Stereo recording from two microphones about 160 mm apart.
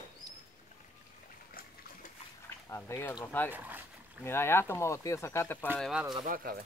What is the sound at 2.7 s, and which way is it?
Speech, 15° left (ahead or behind).